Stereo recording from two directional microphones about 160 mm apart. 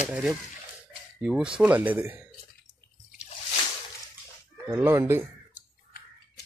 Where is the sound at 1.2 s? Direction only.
5° right (ahead or behind).